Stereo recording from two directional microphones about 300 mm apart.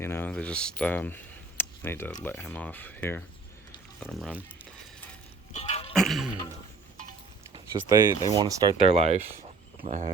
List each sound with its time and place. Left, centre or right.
0.0 s speech: centre
5.5 s music: left
5.9 s throat clearing: centre
7.9 s speech: centre